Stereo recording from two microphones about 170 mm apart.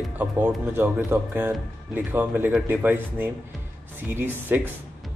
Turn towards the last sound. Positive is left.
turn(degrees=-10)  # may be behind; listen again after turning